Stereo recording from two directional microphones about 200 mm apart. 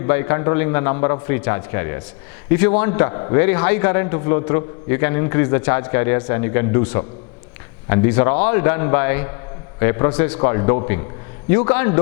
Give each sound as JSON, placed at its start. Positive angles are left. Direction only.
{"t": 0.0, "sound": "a man's voice", "side_deg": 15}
{"t": 3.1, "sound": "a man's voice", "side_deg": 25}
{"t": 3.4, "sound": "a man's voice", "side_deg": 10}